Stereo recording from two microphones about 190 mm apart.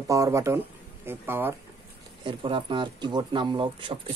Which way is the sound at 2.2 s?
25° right (ahead or behind).